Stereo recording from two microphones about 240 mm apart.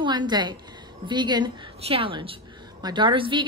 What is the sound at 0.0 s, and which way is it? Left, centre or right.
A woman's voice, centre.